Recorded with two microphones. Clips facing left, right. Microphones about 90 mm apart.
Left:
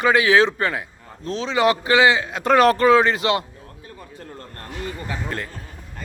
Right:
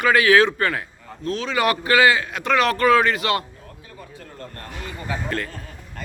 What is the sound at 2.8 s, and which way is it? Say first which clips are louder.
Speech: left 2 dB; 25° left (ahead or behind).